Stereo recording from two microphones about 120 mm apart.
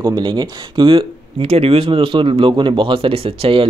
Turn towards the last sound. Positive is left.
turn(degrees=-50)  # may be behind; listen again after turning